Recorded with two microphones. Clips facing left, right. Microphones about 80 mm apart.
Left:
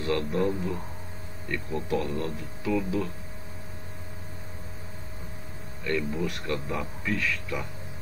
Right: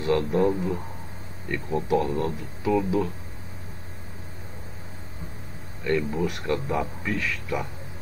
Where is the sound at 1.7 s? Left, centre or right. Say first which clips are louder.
Right 6 dB; centre.